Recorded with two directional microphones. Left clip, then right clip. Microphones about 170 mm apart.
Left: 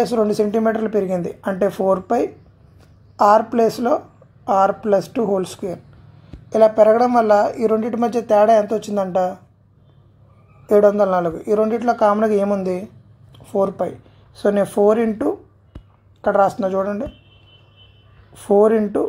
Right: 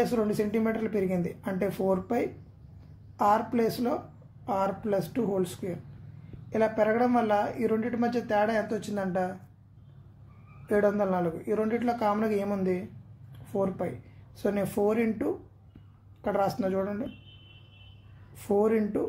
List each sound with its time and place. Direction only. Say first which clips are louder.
0.0 s a woman's voice: left 10 dB; 15° left (ahead or behind)
6.5 s speech: left 14 dB; 20° left (ahead or behind)
10.7 s speech: left 12 dB; 20° left (ahead or behind)
18.3 s speech: left 12 dB; 20° left (ahead or behind)